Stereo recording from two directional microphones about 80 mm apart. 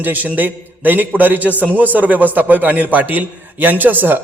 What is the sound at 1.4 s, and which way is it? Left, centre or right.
Speech, left.